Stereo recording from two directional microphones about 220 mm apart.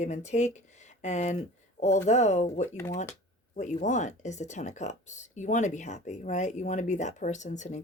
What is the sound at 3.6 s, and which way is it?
Speech, 35° left (ahead or behind).